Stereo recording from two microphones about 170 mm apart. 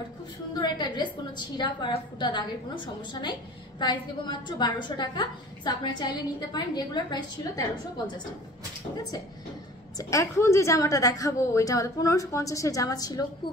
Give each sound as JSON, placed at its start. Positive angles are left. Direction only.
{"t": 0.6, "sound": "a woman's voice", "side_deg": 25}
{"t": 9.9, "sound": "a woman's voice", "side_deg": 15}